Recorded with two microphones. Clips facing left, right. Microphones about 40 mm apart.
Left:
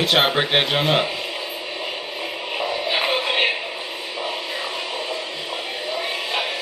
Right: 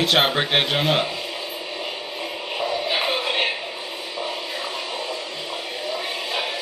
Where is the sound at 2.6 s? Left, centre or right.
Centre.